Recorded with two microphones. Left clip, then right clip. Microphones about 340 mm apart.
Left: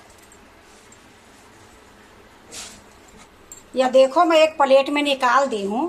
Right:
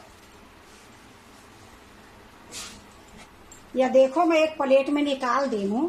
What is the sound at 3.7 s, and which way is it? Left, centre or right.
Speech, left.